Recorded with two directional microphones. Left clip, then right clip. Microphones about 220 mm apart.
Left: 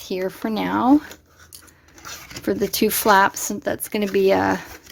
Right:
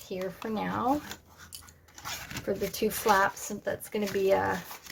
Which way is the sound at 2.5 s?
50° left (ahead or behind).